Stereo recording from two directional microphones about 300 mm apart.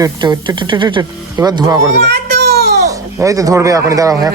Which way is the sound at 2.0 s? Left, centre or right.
Right.